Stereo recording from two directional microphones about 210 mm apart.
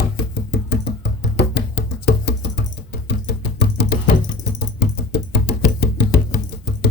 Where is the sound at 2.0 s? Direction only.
55° left (ahead or behind).